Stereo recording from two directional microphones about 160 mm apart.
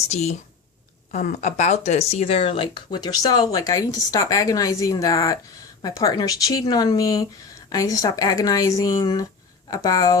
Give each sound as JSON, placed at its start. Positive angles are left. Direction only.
{"t": 1.1, "sound": "speech", "side_deg": 50}